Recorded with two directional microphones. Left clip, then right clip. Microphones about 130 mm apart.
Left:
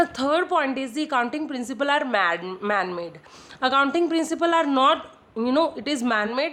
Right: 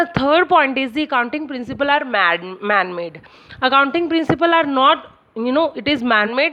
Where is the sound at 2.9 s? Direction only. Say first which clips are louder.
Right 6 dB; 50° right (ahead or behind).